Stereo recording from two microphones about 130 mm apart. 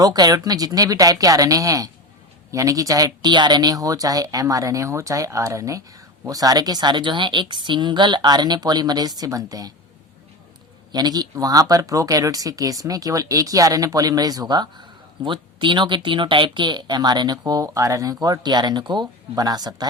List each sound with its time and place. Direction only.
0.0 s speech: 30° right (ahead or behind)
10.9 s speech: 30° right (ahead or behind)